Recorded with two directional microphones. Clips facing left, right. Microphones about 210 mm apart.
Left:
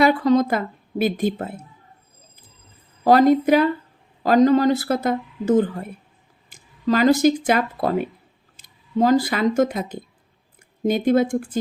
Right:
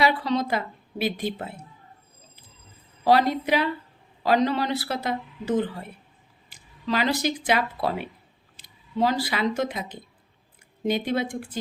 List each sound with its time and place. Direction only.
0.0 s speech: 45° left (ahead or behind)
3.0 s speech: 45° left (ahead or behind)